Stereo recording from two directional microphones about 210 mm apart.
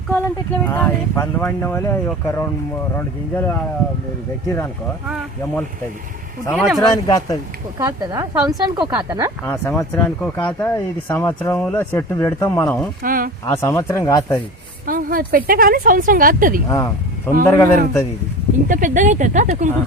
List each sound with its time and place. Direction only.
0.6 s speech: 10° left (ahead or behind)
6.4 s speech: 5° left (ahead or behind)
7.8 s speech: 15° right (ahead or behind)
9.5 s speech: 10° left (ahead or behind)
13.0 s speech: 45° right (ahead or behind)
13.4 s speech: 15° left (ahead or behind)
14.8 s speech: 40° right (ahead or behind)
16.6 s speech: 15° left (ahead or behind)
18.7 s speech: 40° right (ahead or behind)